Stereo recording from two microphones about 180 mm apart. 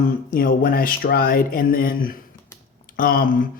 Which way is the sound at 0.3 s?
55° left (ahead or behind).